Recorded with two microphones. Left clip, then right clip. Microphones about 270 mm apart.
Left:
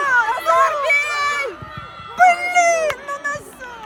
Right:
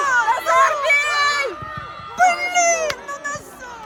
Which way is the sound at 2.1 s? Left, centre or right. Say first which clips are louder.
Left 3 dB; centre.